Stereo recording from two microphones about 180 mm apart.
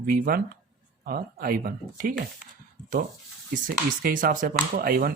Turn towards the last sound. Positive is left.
turn(degrees=-55)  # may be behind; listen again after turning